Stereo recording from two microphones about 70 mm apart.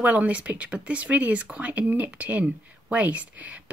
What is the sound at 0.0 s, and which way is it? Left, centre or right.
Speech, right.